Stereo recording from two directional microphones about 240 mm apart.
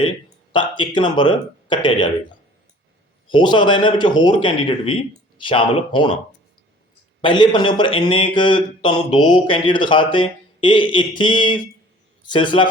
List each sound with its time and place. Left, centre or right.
0.5 s speech: centre
3.2 s speech: centre
7.2 s speech: centre